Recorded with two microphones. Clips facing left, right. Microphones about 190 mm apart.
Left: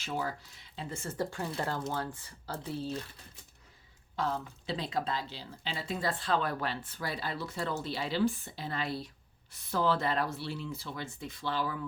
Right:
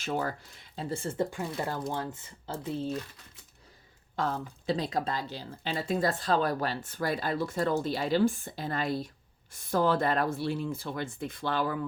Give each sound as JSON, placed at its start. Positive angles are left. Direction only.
{"t": 0.0, "sound": "speech", "side_deg": -50}
{"t": 0.9, "sound": "speech", "side_deg": -30}
{"t": 1.3, "sound": "speech", "side_deg": -15}
{"t": 4.1, "sound": "speech", "side_deg": -50}